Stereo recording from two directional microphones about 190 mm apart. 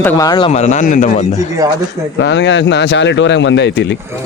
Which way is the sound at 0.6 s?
40° left (ahead or behind).